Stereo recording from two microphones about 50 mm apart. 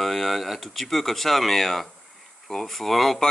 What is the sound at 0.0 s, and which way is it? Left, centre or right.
Speech, centre.